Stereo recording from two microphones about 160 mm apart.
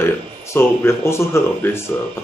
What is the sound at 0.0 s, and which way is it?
Speech, 15° left (ahead or behind).